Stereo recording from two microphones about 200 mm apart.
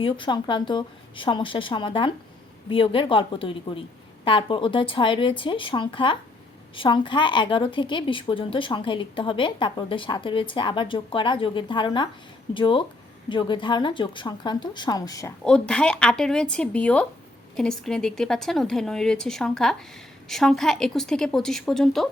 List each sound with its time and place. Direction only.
0.0 s a woman's voice: 25° left (ahead or behind)
15.4 s speech: 5° left (ahead or behind)